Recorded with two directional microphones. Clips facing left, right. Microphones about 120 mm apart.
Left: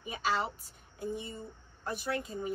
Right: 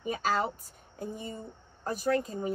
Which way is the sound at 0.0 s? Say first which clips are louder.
Right 3 dB; 45° right (ahead or behind).